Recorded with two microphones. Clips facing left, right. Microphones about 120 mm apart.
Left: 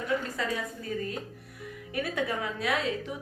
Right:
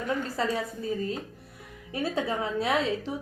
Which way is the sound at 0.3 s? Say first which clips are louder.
Right 4 dB; 25° right (ahead or behind).